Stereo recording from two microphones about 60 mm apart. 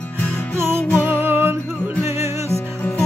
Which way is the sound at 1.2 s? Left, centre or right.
Right.